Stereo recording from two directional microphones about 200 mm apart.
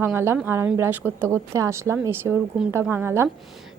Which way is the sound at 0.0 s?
10° right (ahead or behind).